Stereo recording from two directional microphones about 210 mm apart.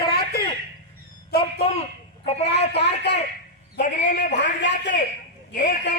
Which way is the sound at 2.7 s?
50° left (ahead or behind).